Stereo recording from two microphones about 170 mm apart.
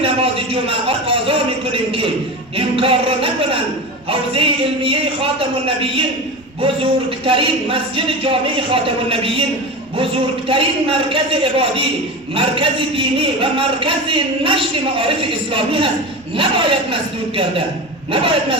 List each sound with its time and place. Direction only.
0.0 s a man's voice: 35° right (ahead or behind)
7.3 s a man's voice: 30° right (ahead or behind)
10.5 s a man's voice: 30° right (ahead or behind)